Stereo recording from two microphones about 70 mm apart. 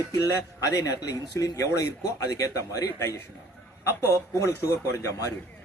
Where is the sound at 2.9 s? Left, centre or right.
Left.